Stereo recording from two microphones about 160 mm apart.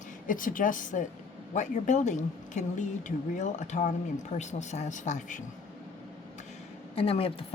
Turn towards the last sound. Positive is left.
turn(degrees=35)  # may be behind; listen again after turning